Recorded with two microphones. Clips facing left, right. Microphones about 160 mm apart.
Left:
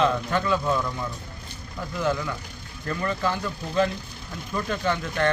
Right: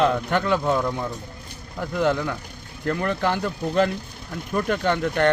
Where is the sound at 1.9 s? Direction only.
60° right (ahead or behind).